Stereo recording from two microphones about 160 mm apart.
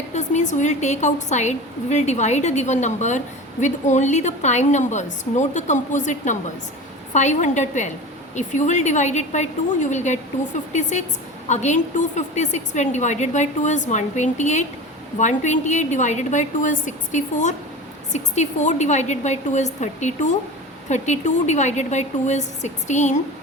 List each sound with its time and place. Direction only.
0.1 s a woman's voice: 45° left (ahead or behind)